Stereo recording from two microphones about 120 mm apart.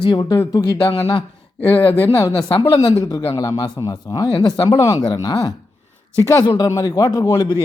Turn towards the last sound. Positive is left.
turn(degrees=35)  # may be behind; listen again after turning